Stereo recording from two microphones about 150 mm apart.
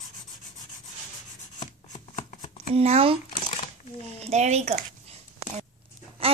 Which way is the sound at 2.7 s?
40° right (ahead or behind).